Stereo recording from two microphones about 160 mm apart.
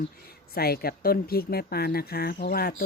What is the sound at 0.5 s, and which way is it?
Speech, 70° left (ahead or behind).